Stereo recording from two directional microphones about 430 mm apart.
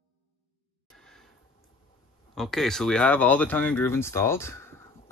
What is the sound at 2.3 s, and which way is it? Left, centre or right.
Speech, centre.